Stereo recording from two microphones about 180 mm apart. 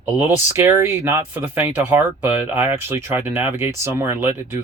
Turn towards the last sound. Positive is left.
turn(degrees=-15)  # may be behind; listen again after turning